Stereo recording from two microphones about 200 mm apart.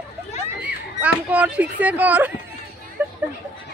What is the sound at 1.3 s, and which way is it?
A woman's voice, 5° right (ahead or behind).